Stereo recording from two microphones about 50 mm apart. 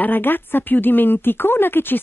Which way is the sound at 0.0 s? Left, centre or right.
Left.